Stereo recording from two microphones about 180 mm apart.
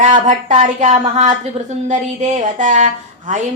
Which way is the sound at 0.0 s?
45° right (ahead or behind).